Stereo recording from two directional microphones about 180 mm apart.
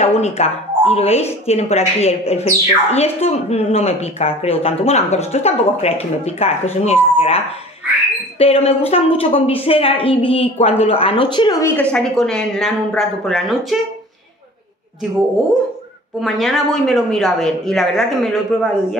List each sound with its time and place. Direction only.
0.2 s speech: 35° left (ahead or behind)
11.6 s a woman's voice: 10° left (ahead or behind)
16.2 s a woman's voice: centre (ahead or behind)